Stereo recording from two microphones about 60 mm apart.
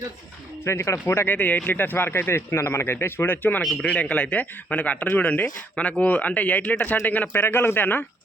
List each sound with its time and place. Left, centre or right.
0.6 s speech: left
1.3 s speech: left
3.8 s speech: left